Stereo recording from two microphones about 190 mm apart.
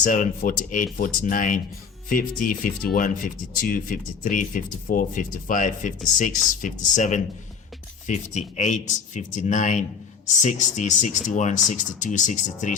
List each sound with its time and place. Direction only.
0.0 s speech: 45° left (ahead or behind)